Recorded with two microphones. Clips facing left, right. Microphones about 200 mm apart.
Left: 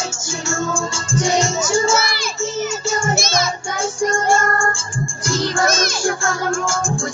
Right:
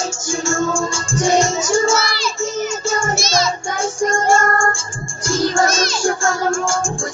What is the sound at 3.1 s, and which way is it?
Music, 55° left (ahead or behind).